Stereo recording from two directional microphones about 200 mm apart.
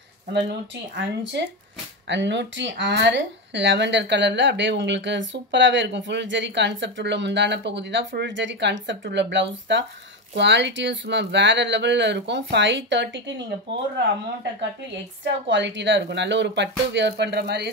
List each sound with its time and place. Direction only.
0.3 s speech: 60° right (ahead or behind)
15.4 s speech: 65° right (ahead or behind)